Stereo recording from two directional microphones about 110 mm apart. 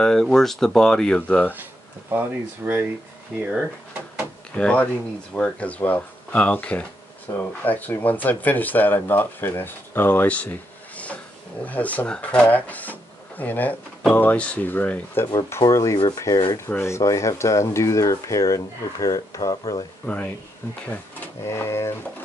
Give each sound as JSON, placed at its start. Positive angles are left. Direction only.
{"t": 0.0, "sound": "speech", "side_deg": 5}
{"t": 1.5, "sound": "speech", "side_deg": -20}
{"t": 4.6, "sound": "speech", "side_deg": 10}
{"t": 15.6, "sound": "speech", "side_deg": 30}
{"t": 16.5, "sound": "rub", "side_deg": 20}
{"t": 19.5, "sound": "speech", "side_deg": 45}
{"t": 20.1, "sound": "speech", "side_deg": 15}
{"t": 21.5, "sound": "rub", "side_deg": 25}